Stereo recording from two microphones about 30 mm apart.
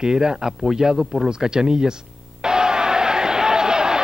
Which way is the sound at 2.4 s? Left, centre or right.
Right.